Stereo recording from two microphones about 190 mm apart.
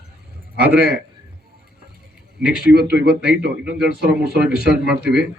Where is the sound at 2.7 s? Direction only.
60° right (ahead or behind).